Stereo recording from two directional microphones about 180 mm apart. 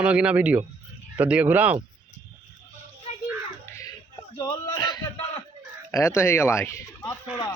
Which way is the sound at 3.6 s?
15° left (ahead or behind).